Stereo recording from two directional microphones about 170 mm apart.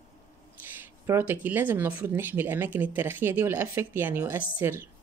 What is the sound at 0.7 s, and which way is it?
A woman's voice, 15° right (ahead or behind).